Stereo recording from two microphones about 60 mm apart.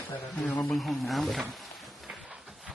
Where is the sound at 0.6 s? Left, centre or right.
Centre.